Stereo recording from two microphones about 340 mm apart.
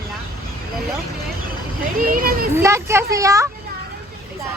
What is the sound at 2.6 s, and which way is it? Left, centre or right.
Speech, centre.